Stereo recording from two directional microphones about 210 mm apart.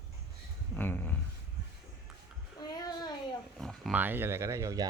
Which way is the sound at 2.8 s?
20° left (ahead or behind).